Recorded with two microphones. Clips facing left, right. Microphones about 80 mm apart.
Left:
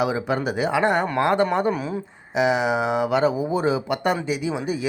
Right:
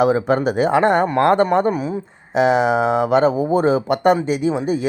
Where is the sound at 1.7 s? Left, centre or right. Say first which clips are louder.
Right 4 dB; centre.